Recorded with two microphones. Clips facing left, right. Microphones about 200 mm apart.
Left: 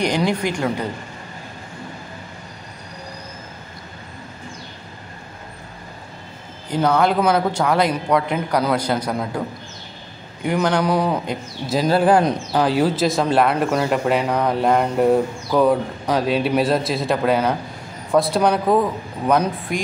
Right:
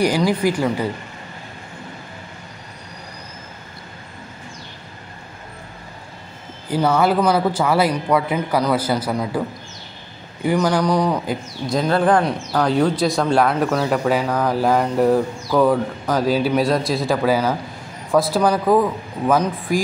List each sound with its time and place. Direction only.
0.0 s speech: 5° right (ahead or behind)
6.7 s speech: 5° right (ahead or behind)
10.4 s speech: 5° right (ahead or behind)
12.2 s speech: 20° left (ahead or behind)
12.6 s speech: 5° left (ahead or behind)